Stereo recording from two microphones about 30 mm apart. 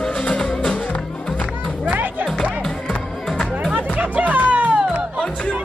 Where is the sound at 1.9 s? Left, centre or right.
Right.